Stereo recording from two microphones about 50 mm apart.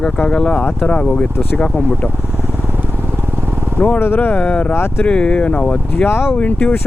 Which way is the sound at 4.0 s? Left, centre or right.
Left.